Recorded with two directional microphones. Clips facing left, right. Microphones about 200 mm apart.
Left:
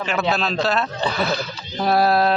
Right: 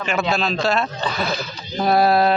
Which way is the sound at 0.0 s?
10° right (ahead or behind).